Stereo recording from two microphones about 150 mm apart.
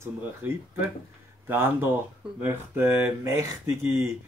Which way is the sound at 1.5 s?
15° right (ahead or behind).